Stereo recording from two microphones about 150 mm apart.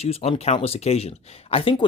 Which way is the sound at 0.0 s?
40° left (ahead or behind).